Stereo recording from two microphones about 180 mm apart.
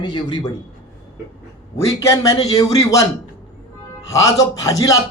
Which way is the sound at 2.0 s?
20° left (ahead or behind).